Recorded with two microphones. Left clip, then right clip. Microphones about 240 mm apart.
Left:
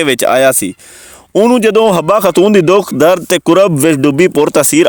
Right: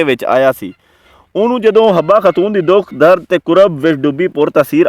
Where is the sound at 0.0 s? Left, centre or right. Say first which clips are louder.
Left 2 dB; left.